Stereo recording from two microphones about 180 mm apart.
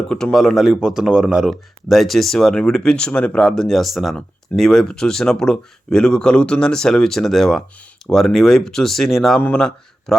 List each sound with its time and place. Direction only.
0.1 s speech: 5° left (ahead or behind)